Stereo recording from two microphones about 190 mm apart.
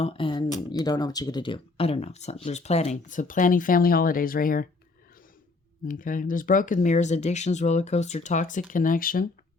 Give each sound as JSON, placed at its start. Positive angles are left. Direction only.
{"t": 0.0, "sound": "speech", "side_deg": 30}
{"t": 5.8, "sound": "speech", "side_deg": 45}